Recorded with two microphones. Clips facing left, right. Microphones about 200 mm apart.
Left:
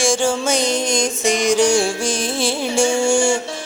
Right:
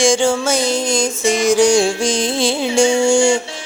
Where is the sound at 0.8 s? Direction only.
20° left (ahead or behind).